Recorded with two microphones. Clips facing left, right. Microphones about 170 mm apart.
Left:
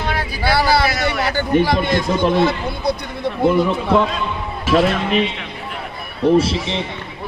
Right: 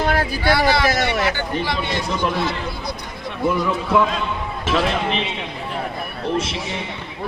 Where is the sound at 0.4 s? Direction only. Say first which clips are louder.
Left 2 dB; 35° left (ahead or behind).